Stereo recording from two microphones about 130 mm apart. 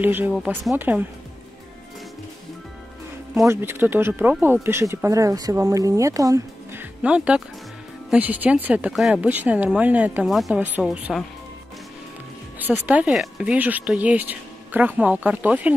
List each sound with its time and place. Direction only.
0.0 s speech: 15° right (ahead or behind)
3.4 s speech: 15° right (ahead or behind)
12.8 s speech: 10° right (ahead or behind)